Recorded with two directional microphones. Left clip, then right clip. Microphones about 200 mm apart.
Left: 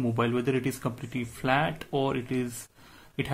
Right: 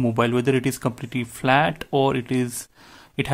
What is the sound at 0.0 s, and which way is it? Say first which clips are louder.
Speech: right 7 dB; 35° right (ahead or behind).